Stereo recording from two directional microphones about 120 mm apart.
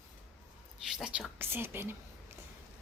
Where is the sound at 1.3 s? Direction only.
20° right (ahead or behind).